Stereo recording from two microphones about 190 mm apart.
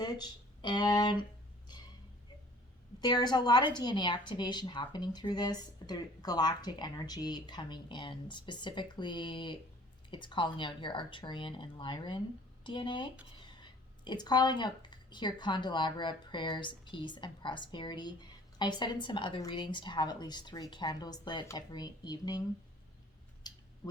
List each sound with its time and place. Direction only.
0.0 s speech: 20° left (ahead or behind)
3.0 s speech: 20° left (ahead or behind)
23.4 s a sound: 20° left (ahead or behind)